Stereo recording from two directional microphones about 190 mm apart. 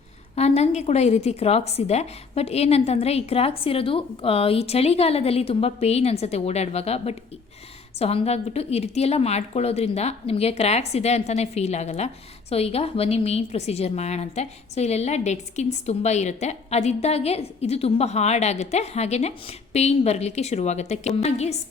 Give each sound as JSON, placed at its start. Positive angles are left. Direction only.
{"t": 0.3, "sound": "a woman's voice", "side_deg": 35}